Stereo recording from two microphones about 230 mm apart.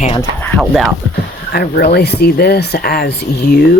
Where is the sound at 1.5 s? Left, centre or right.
Left.